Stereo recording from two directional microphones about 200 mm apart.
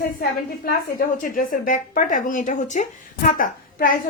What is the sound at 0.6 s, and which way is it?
A woman's voice, 45° left (ahead or behind).